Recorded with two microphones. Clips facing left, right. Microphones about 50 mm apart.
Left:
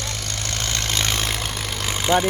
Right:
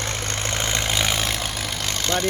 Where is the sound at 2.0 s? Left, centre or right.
Centre.